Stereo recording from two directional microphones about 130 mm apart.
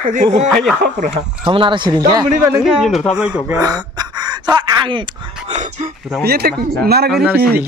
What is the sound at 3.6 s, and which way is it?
Speech, 30° right (ahead or behind).